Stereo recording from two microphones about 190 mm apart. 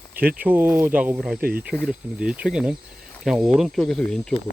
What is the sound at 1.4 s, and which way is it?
Speech, 50° right (ahead or behind).